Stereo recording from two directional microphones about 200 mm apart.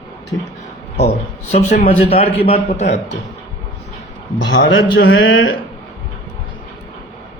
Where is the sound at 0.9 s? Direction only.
35° left (ahead or behind).